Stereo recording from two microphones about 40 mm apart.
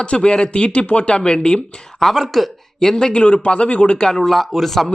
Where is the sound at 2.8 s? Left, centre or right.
Centre.